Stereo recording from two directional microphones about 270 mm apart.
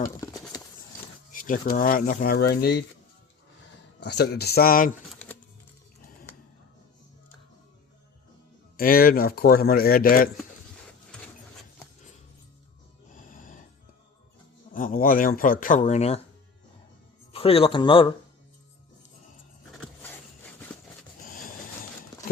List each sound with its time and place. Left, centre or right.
1.3 s speech: left
4.0 s speech: left
8.7 s speech: left
13.1 s music: left
14.7 s speech: left
17.3 s speech: left